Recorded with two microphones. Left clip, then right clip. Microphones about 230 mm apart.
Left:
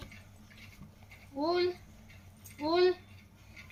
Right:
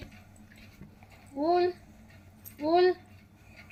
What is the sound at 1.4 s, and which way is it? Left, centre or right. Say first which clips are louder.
Speech: right 5 dB; left.